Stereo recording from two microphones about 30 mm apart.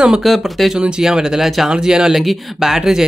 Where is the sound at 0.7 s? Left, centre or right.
Right.